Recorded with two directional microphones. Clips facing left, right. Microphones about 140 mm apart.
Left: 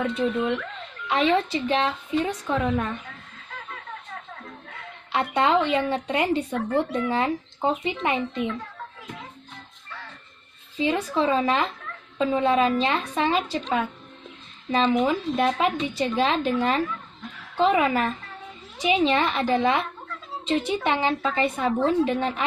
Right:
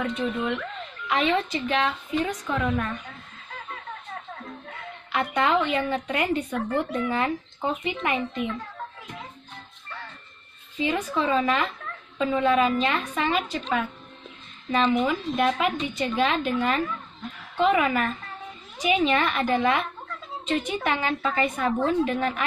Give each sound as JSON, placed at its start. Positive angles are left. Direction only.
{"t": 1.0, "sound": "a woman's voice", "side_deg": 30}
{"t": 5.1, "sound": "speech", "side_deg": 30}
{"t": 10.8, "sound": "a woman's voice", "side_deg": 30}
{"t": 14.7, "sound": "a woman's voice", "side_deg": 30}